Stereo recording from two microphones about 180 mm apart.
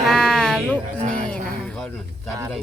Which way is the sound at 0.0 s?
5° left (ahead or behind).